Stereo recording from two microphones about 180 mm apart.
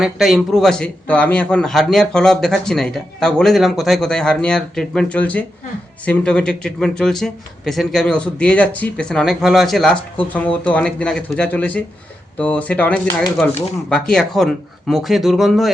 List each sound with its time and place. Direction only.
0.0 s a man's voice: centre (ahead or behind)